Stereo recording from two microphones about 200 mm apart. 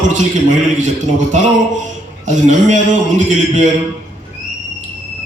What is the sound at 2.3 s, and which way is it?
A man's voice, 35° right (ahead or behind).